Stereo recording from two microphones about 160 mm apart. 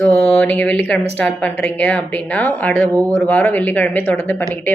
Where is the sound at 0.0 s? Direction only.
10° left (ahead or behind).